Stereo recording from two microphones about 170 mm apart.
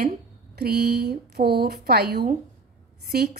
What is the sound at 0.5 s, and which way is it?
A woman's voice, 70° right (ahead or behind).